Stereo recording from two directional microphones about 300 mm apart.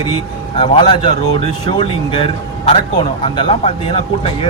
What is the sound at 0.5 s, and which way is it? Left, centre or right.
A man's voice, centre.